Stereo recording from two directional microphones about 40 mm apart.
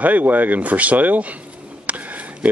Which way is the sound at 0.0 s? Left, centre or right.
Right.